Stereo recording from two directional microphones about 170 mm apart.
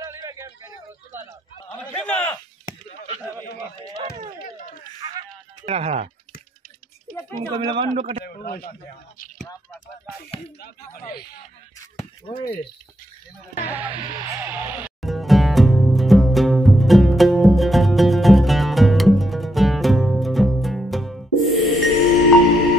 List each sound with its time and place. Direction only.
0.0 s a sound: 20° right (ahead or behind)
1.7 s a sound: 10° left (ahead or behind)
5.7 s a man's voice: 40° right (ahead or behind)
7.3 s a man's voice: 30° right (ahead or behind)
8.3 s a man's voice: 60° left (ahead or behind)
10.6 s speech: 70° left (ahead or behind)
12.0 s a sound: 35° left (ahead or behind)
13.7 s speech: 10° right (ahead or behind)
13.9 s speech: 25° right (ahead or behind)
14.4 s music: 10° right (ahead or behind)